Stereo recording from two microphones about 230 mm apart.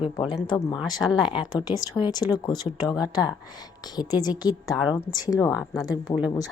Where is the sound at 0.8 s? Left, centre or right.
Centre.